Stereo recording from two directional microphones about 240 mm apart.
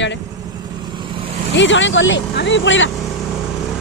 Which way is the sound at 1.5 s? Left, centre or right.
Left.